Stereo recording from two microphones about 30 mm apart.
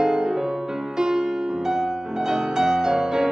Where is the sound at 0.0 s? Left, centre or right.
Right.